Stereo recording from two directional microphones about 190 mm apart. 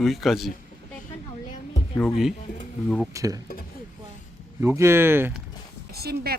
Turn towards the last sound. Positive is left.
turn(degrees=-55)  # may be behind; listen again after turning